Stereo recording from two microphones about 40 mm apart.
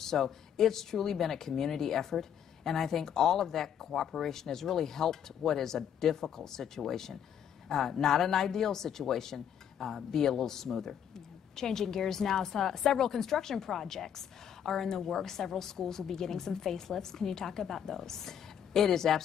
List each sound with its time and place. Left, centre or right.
0.0 s speech: centre